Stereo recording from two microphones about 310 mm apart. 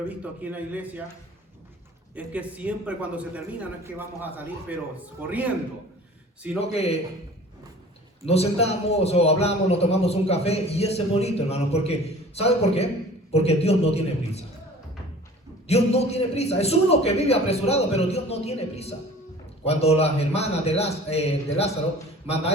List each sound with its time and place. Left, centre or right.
0.1 s speech: centre
2.1 s speech: centre
6.6 s a man's voice: centre
8.3 s a man's voice: centre
15.6 s a man's voice: centre